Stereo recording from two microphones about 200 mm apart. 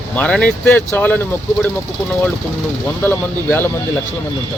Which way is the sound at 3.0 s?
10° left (ahead or behind).